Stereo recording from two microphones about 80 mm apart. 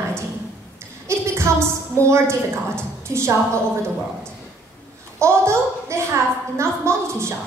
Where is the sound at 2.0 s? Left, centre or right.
Right.